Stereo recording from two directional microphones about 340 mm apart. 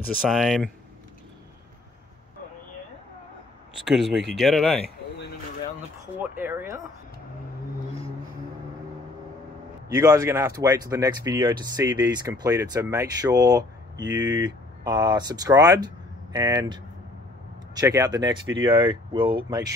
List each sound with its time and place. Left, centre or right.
0.3 s speech: centre
3.8 s speech: centre
6.1 s speech: centre
9.9 s speech: centre
14.1 s speech: right
14.4 s speech: centre